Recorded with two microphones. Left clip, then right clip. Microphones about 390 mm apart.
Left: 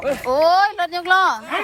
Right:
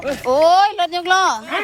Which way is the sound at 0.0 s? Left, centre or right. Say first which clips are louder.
Left 1 dB; centre.